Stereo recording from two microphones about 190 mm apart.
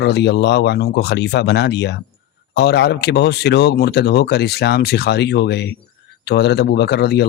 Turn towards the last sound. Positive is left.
turn(degrees=60)  # may be behind; listen again after turning